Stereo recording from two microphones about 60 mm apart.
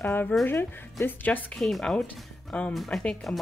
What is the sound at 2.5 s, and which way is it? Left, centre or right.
Speech, left.